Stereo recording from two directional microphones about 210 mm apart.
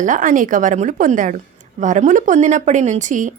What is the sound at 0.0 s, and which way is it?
Speech, 40° right (ahead or behind).